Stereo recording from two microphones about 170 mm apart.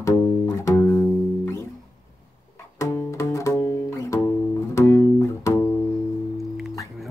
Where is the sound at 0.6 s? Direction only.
15° left (ahead or behind).